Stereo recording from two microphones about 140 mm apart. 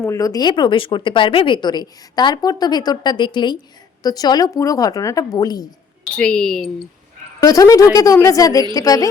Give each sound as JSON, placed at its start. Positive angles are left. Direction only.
{"t": 0.0, "sound": "speech", "side_deg": 25}
{"t": 6.1, "sound": "speech", "side_deg": 5}
{"t": 7.4, "sound": "speech", "side_deg": 25}